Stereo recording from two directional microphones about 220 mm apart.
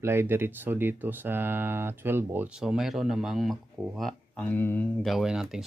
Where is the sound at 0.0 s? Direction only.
10° right (ahead or behind).